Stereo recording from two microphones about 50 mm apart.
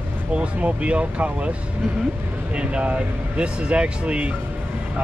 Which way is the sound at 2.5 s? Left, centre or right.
Right.